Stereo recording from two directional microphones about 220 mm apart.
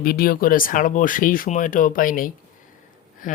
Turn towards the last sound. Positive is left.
turn(degrees=35)  # may be behind; listen again after turning